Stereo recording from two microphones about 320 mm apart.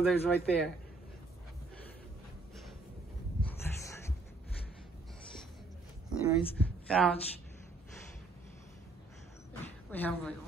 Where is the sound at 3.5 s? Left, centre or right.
Centre.